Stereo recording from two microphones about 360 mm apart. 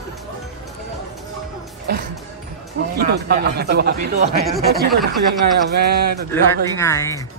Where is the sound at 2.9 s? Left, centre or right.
Right.